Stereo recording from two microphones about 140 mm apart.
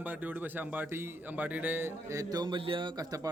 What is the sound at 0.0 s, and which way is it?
A man's voice, 10° right (ahead or behind).